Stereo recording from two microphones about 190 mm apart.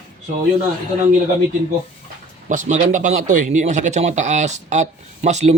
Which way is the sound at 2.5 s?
40° right (ahead or behind).